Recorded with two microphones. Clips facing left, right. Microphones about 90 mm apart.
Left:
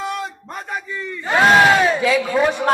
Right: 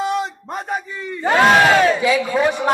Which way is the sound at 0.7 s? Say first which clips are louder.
Even; 40° right (ahead or behind).